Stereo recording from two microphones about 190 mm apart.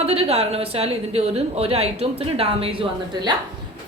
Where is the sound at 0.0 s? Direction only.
30° right (ahead or behind).